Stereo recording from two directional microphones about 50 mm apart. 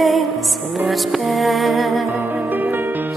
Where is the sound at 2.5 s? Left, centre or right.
Right.